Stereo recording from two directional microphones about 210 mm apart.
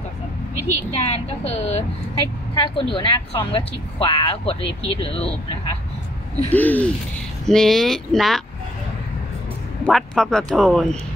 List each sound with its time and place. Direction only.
0.7 s a woman's voice: 30° left (ahead or behind)
6.5 s a sound: 10° left (ahead or behind)
7.4 s speech: centre (ahead or behind)
9.8 s speech: centre (ahead or behind)